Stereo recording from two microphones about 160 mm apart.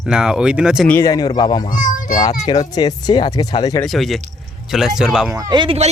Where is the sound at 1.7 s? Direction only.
55° left (ahead or behind).